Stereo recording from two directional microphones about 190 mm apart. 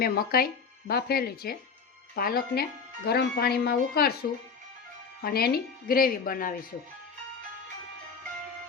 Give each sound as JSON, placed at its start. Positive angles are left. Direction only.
{"t": 0.0, "sound": "speech", "side_deg": 50}